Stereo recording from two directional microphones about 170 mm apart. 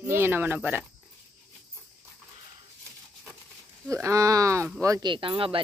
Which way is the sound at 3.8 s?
20° right (ahead or behind).